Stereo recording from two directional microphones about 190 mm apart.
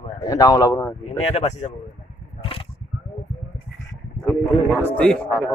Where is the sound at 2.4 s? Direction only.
30° left (ahead or behind).